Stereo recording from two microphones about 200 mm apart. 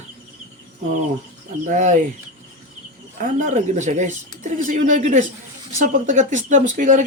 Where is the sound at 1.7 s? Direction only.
40° right (ahead or behind).